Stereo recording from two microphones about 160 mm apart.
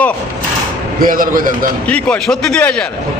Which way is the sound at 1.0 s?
60° right (ahead or behind).